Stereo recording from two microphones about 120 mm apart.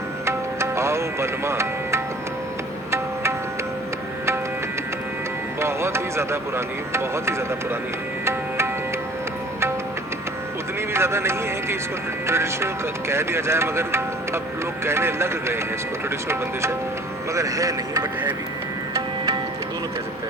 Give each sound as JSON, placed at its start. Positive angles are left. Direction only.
{"t": 0.3, "sound": "music", "side_deg": -25}
{"t": 5.5, "sound": "music", "side_deg": -20}
{"t": 6.9, "sound": "speech", "side_deg": -20}
{"t": 8.2, "sound": "music", "side_deg": -20}
{"t": 10.8, "sound": "speech", "side_deg": -20}
{"t": 18.9, "sound": "music", "side_deg": -30}